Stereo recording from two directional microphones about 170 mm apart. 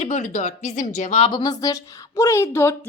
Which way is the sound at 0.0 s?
45° left (ahead or behind).